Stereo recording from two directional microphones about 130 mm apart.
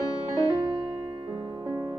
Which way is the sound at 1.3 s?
35° right (ahead or behind).